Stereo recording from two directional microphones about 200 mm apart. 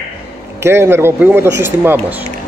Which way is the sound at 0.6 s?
10° right (ahead or behind).